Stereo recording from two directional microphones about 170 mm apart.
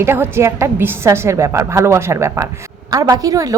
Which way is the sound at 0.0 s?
15° right (ahead or behind).